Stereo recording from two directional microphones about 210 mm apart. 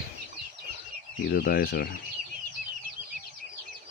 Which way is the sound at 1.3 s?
45° left (ahead or behind).